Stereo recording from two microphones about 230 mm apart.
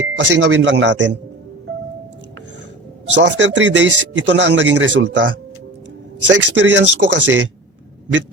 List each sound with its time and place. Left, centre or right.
0.2 s speech: right
3.2 s speech: right
6.3 s speech: right